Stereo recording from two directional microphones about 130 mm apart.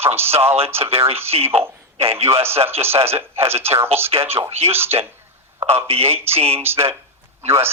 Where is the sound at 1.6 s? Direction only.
20° right (ahead or behind).